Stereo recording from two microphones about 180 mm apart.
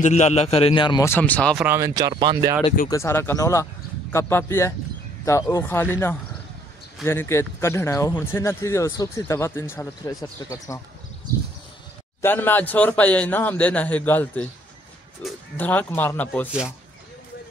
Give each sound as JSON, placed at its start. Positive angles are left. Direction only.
{"t": 0.0, "sound": "a man's voice", "side_deg": 40}
{"t": 1.0, "sound": "speech", "side_deg": 10}
{"t": 1.6, "sound": "speech", "side_deg": -15}
{"t": 2.9, "sound": "speech", "side_deg": 15}
{"t": 12.2, "sound": "speech", "side_deg": 10}
{"t": 15.5, "sound": "speech", "side_deg": 10}